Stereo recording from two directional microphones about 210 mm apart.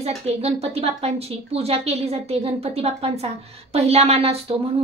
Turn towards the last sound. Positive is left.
turn(degrees=-30)  # may be behind; listen again after turning